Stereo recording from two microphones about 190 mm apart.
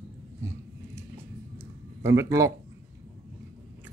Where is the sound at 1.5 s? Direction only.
15° right (ahead or behind).